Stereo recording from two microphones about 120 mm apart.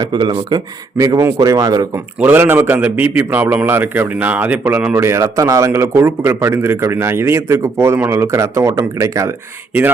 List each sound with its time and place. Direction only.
0.0 s speech: 35° right (ahead or behind)
2.1 s a man's voice: 15° right (ahead or behind)
4.9 s speech: 25° right (ahead or behind)